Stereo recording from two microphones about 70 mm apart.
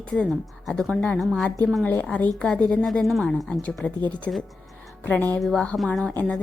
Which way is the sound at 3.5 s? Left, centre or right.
Centre.